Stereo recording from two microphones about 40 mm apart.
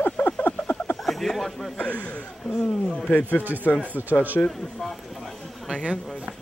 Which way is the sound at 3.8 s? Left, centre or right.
Right.